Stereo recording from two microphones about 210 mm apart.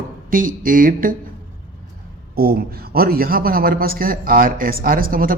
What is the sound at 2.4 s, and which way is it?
A man's voice, 45° right (ahead or behind).